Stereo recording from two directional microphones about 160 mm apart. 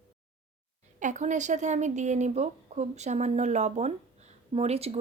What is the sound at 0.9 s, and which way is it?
Speech, 50° right (ahead or behind).